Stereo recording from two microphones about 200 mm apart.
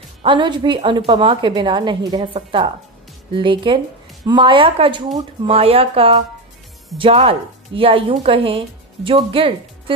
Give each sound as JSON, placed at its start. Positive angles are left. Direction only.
{"t": 0.2, "sound": "a woman's voice", "side_deg": -25}